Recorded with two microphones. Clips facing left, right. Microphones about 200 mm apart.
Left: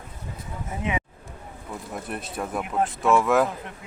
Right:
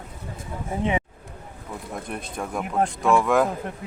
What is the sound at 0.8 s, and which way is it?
Speech, 30° right (ahead or behind).